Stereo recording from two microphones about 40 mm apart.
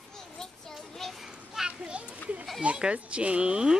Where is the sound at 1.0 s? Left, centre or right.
Centre.